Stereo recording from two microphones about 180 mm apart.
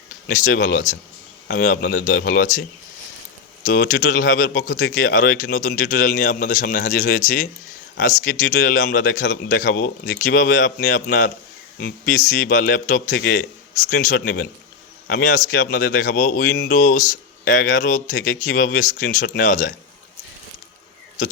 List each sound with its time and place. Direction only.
0.3 s speech: 50° left (ahead or behind)
3.7 s speech: 65° left (ahead or behind)
4.0 s speech: 50° left (ahead or behind)
13.1 s speech: 65° left (ahead or behind)
13.9 s speech: 50° left (ahead or behind)
19.0 s speech: 60° left (ahead or behind)